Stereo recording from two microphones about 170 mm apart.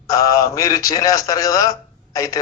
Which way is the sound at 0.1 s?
20° left (ahead or behind).